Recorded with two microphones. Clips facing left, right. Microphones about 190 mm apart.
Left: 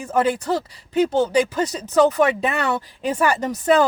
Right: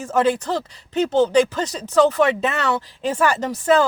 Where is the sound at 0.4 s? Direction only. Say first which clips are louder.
Left 2 dB; 10° left (ahead or behind).